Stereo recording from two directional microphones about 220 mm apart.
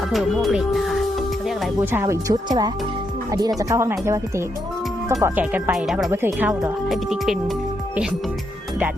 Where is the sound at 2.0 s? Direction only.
15° right (ahead or behind).